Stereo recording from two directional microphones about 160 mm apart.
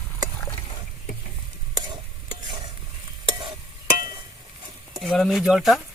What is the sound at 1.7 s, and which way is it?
Stir, 25° right (ahead or behind).